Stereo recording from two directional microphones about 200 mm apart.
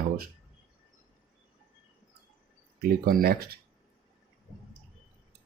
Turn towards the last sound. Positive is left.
turn(degrees=-50)  # may be behind; listen again after turning